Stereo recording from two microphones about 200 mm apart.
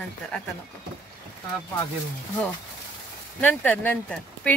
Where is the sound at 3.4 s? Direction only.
10° left (ahead or behind).